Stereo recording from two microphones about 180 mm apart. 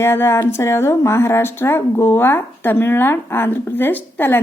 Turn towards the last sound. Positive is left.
turn(degrees=10)  # may be behind; listen again after turning